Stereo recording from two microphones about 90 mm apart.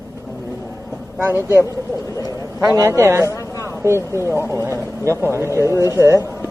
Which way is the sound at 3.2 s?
35° left (ahead or behind).